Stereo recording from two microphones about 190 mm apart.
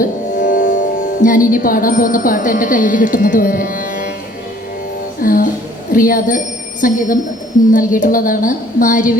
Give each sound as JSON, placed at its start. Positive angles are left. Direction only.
{"t": 0.0, "sound": "speech", "side_deg": 40}
{"t": 5.2, "sound": "a woman's voice", "side_deg": 50}